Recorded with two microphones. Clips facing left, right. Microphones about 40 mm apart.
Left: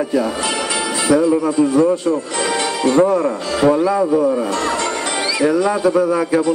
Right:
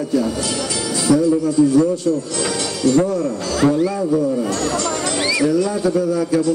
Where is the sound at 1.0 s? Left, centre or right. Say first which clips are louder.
Left 1 dB; left.